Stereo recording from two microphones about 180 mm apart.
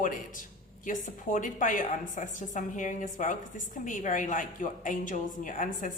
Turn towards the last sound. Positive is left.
turn(degrees=45)  # may be behind; listen again after turning